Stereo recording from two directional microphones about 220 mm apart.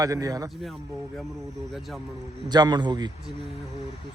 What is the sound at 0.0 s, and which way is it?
Speech, 15° right (ahead or behind).